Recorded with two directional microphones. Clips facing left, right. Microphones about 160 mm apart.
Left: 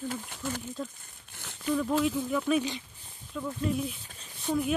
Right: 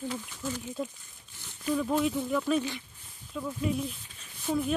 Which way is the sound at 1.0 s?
65° left (ahead or behind).